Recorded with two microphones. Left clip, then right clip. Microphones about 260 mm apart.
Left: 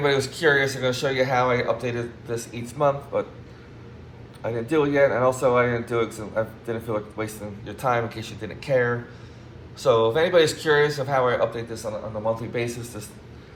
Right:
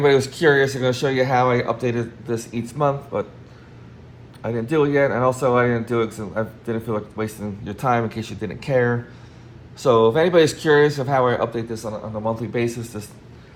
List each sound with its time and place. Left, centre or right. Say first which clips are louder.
0.0 s speech: right 5 dB; right
4.4 s speech: right 3 dB; right